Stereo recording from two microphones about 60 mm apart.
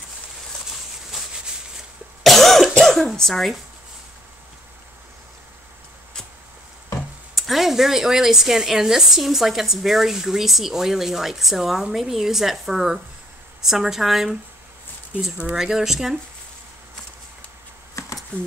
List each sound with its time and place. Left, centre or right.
2.2 s cough: centre
7.3 s speech: centre
15.5 s speech: centre
18.0 s a sound: left